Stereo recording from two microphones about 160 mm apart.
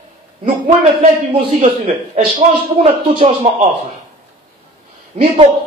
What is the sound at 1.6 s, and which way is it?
A man's voice, 35° right (ahead or behind).